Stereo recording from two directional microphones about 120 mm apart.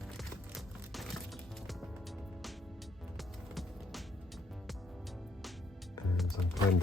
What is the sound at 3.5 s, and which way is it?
Music, centre (ahead or behind).